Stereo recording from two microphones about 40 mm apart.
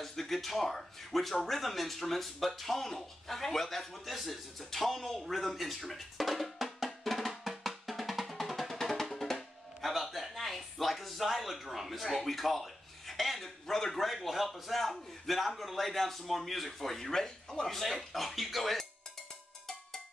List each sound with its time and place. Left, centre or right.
0.0 s speech: centre
4.6 s music: centre
17.9 s speech: centre